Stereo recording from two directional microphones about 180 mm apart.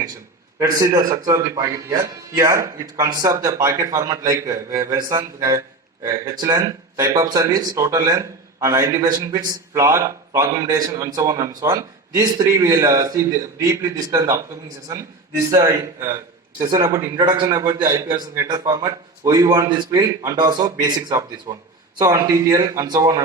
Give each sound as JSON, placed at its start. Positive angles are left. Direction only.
{"t": 0.6, "sound": "a man's voice", "side_deg": -20}